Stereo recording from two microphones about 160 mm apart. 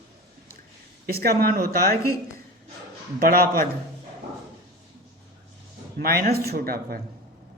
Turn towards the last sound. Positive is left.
turn(degrees=-70)  # may be behind; listen again after turning